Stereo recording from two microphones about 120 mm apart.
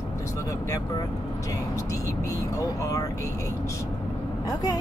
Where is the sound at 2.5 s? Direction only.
30° left (ahead or behind).